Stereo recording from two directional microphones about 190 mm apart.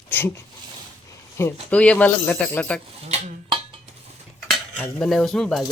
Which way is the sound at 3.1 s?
35° right (ahead or behind).